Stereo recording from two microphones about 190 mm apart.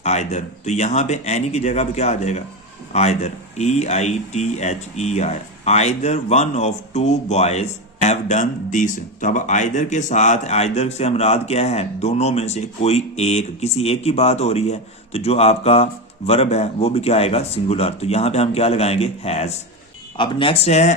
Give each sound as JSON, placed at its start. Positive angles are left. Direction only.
{"t": 0.0, "sound": "speech", "side_deg": 35}